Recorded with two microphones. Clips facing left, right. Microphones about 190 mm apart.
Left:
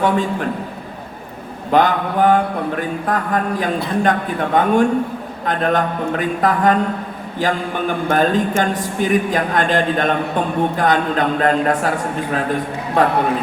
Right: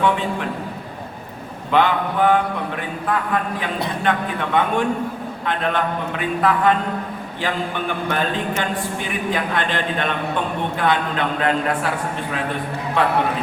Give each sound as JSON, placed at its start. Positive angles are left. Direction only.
{"t": 0.0, "sound": "a man's voice", "side_deg": 40}
{"t": 1.7, "sound": "speech", "side_deg": 40}